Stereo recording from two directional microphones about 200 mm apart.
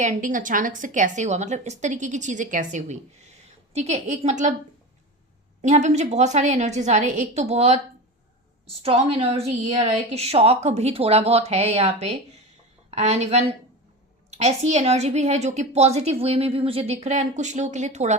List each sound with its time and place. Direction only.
0.0 s a woman's voice: 40° right (ahead or behind)
5.6 s a woman's voice: 35° right (ahead or behind)
8.8 s a woman's voice: 30° right (ahead or behind)